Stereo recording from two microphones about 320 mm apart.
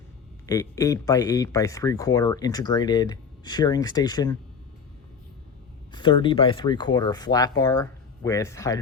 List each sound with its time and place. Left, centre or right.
0.4 s speech: centre
5.9 s speech: centre